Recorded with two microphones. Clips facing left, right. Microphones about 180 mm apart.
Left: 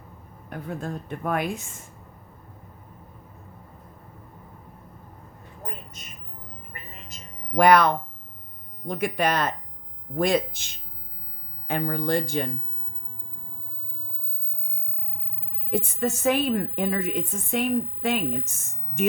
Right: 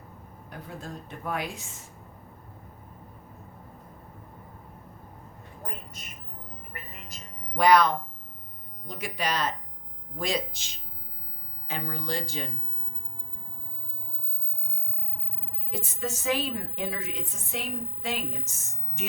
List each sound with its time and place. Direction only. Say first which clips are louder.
0.8 s a woman's voice: left 7 dB; 55° left (ahead or behind)
7.5 s a woman's voice: left 3 dB; 55° left (ahead or behind)
15.7 s a woman's voice: left 8 dB; 55° left (ahead or behind)